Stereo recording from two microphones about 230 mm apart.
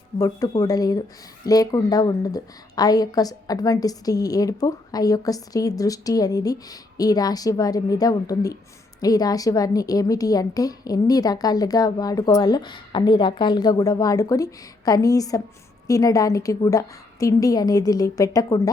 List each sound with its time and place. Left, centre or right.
0.2 s a woman's voice: centre